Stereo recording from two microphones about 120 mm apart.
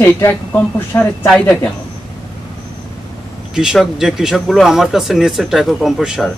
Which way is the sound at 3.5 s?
5° right (ahead or behind).